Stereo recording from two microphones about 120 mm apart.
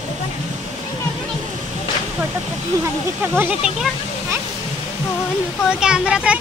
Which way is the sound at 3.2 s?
15° right (ahead or behind).